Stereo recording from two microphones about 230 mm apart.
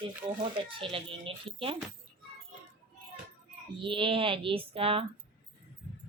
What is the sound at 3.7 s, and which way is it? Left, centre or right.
Speech, right.